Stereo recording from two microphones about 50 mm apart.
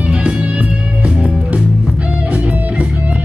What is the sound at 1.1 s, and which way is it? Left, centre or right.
Music, centre.